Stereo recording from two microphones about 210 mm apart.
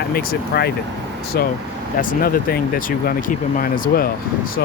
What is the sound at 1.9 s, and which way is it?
Speech, 40° left (ahead or behind).